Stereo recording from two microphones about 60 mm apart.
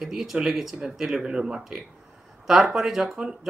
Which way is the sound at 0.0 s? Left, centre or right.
Centre.